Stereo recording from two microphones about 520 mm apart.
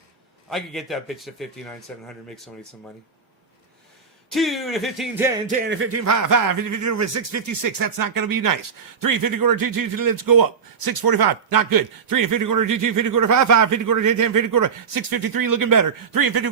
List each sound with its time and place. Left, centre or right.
0.5 s a man's voice: centre
4.3 s speech: centre; by 16.5 s right